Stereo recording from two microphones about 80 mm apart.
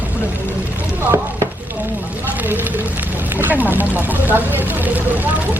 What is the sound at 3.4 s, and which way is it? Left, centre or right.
Speech, right.